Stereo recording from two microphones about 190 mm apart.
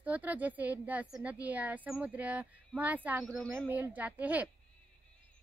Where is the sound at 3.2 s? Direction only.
5° left (ahead or behind).